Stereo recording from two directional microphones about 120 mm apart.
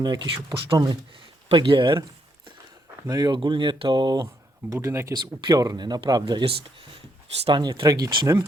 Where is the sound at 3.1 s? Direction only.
35° right (ahead or behind).